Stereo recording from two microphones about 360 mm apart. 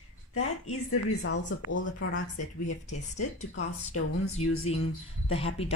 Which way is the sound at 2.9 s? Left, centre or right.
Centre.